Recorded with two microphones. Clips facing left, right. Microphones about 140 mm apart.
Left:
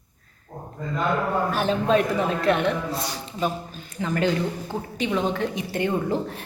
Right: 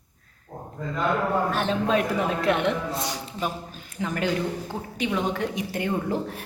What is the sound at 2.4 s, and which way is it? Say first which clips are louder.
A woman's voice: left 1 dB; 15° right (ahead or behind).